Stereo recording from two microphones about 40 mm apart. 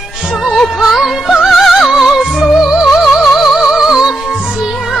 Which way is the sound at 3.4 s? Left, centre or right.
Centre.